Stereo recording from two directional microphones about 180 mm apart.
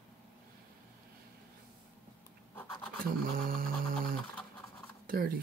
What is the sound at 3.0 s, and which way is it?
Speech, 50° right (ahead or behind).